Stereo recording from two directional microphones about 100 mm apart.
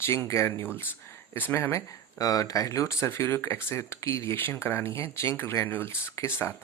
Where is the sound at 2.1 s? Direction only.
35° left (ahead or behind).